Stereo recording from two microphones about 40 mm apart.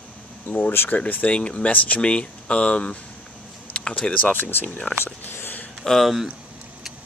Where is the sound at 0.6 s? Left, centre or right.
Left.